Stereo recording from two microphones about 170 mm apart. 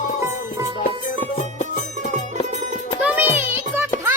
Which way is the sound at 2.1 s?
45° right (ahead or behind).